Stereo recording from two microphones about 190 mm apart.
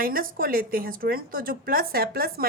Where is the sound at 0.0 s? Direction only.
50° right (ahead or behind).